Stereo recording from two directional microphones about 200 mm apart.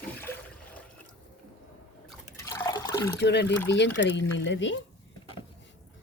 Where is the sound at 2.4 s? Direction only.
15° left (ahead or behind).